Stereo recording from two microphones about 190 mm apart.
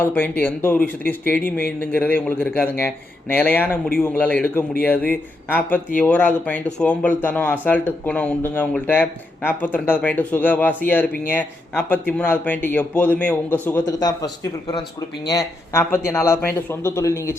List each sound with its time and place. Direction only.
0.0 s speech: 10° left (ahead or behind)
1.5 s speech: 50° left (ahead or behind)
1.8 s speech: 10° left (ahead or behind)
15.3 s speech: 15° left (ahead or behind)